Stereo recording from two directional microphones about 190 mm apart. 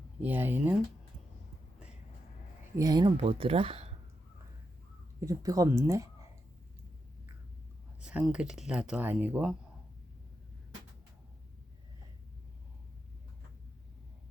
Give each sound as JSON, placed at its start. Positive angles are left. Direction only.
{"t": 0.2, "sound": "speech", "side_deg": -10}
{"t": 2.7, "sound": "speech", "side_deg": -20}
{"t": 5.2, "sound": "speech", "side_deg": -15}
{"t": 8.0, "sound": "speech", "side_deg": -5}